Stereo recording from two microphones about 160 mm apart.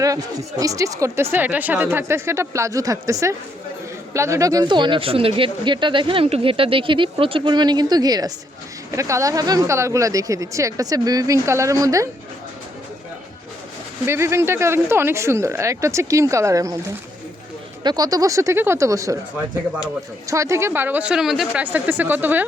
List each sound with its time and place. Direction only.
0.0 s speech: 20° right (ahead or behind)
14.1 s speech: 15° right (ahead or behind)
17.8 s speech: 25° right (ahead or behind)
20.2 s speech: 20° right (ahead or behind)